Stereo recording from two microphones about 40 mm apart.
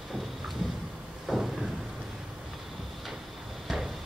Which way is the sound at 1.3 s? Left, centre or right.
Centre.